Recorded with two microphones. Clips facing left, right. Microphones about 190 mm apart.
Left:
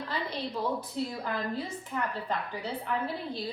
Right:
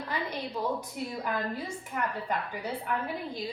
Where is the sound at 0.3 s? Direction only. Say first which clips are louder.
Left 1 dB; 10° right (ahead or behind).